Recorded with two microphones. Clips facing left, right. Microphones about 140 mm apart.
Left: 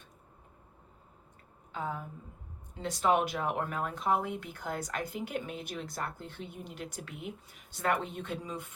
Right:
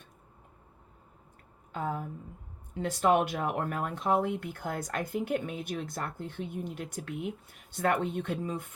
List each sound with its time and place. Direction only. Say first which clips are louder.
1.7 s speech: right 3 dB; 45° right (ahead or behind)